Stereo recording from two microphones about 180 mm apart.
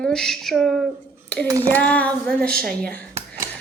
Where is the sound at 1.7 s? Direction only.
10° left (ahead or behind).